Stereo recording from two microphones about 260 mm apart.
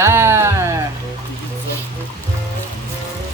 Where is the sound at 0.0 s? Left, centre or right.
Centre.